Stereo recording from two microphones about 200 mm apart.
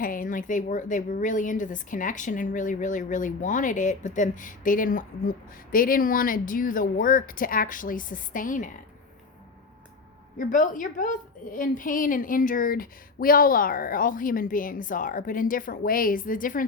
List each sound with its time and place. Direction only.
0.0 s a woman's voice: 45° left (ahead or behind)
10.3 s a woman's voice: 40° left (ahead or behind)